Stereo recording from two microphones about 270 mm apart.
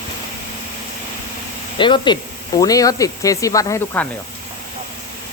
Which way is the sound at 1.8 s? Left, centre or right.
Centre.